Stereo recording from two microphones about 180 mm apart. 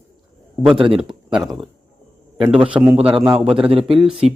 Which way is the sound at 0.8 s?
30° right (ahead or behind).